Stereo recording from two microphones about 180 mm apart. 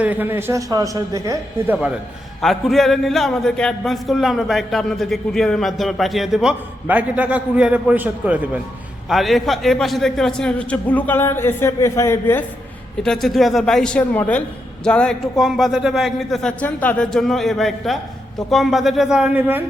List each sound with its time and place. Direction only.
0.0 s a man's voice: 10° right (ahead or behind)
2.4 s a man's voice: centre (ahead or behind)
13.0 s a man's voice: centre (ahead or behind)